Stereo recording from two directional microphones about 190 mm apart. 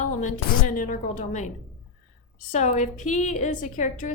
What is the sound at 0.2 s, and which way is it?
A woman's voice, 45° left (ahead or behind).